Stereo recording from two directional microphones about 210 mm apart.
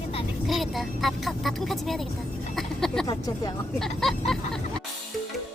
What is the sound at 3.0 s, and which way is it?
Speech, 15° left (ahead or behind).